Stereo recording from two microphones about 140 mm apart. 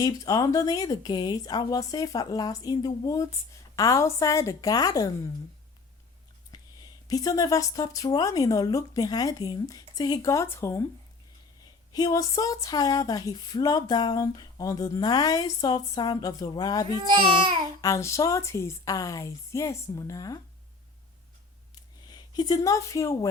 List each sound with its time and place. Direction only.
0.0 s speech: 25° left (ahead or behind)
6.5 s speech: 30° left (ahead or behind)
11.9 s speech: 25° left (ahead or behind)
17.1 s speech: 35° right (ahead or behind)
17.7 s speech: 25° left (ahead or behind)
22.0 s a woman's voice: 30° left (ahead or behind)